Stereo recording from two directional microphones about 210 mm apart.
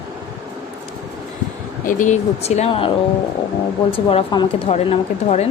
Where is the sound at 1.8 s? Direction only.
35° left (ahead or behind).